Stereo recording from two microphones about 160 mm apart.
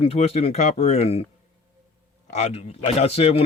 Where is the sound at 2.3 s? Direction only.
40° left (ahead or behind).